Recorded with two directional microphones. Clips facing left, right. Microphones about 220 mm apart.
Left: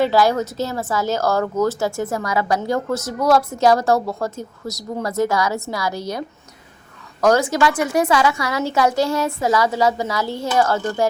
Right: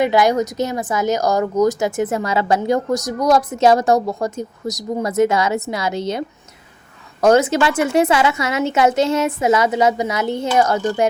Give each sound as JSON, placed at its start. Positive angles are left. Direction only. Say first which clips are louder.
{"t": 0.0, "sound": "speech", "louder": "right 1 dB", "side_deg": -20}